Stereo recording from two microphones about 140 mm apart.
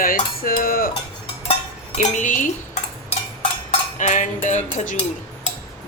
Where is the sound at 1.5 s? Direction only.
50° left (ahead or behind).